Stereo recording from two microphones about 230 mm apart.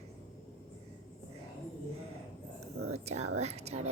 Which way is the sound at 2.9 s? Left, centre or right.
Right.